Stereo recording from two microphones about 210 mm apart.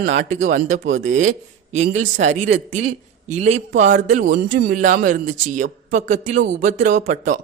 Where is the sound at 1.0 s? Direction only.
70° right (ahead or behind).